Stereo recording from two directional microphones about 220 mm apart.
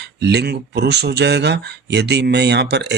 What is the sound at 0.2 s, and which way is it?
Speech, 50° right (ahead or behind).